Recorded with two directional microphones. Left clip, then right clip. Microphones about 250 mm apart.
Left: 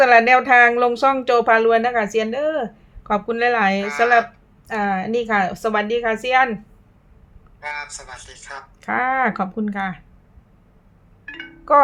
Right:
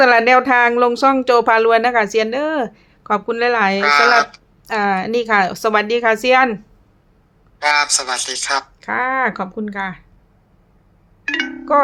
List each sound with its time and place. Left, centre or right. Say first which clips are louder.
0.0 s speech: right 1 dB; centre
3.8 s speech: right 7 dB; right
4.6 s speech: right 4 dB; centre
7.6 s speech: right 14 dB; right
8.8 s speech: left 2 dB; centre
11.3 s speech: right 14 dB; right
11.7 s speech: left 1 dB; centre